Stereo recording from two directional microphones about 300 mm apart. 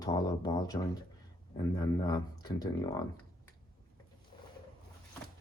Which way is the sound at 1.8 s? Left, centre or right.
Centre.